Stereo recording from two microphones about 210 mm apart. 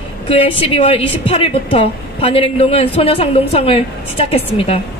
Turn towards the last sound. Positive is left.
turn(degrees=30)  # may be behind; listen again after turning